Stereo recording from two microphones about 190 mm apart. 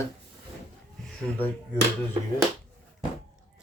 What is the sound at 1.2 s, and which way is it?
Speech, 5° left (ahead or behind).